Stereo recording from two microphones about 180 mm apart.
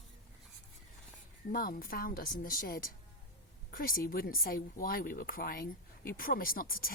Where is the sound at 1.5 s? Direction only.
55° left (ahead or behind).